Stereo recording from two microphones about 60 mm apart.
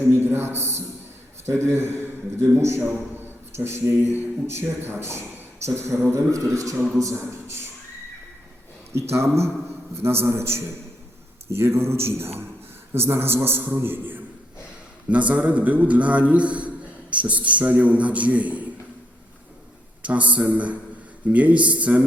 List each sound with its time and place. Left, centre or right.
0.1 s a sound: right
1.5 s a man's voice: right
7.0 s a sound: right
8.9 s a man's voice: right
15.1 s a man's voice: right
20.0 s a man's voice: right